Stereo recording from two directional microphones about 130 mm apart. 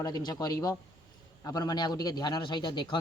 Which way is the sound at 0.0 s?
30° left (ahead or behind).